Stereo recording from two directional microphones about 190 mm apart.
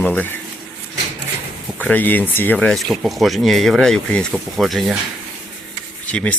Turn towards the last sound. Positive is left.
turn(degrees=5)  # may be behind; listen again after turning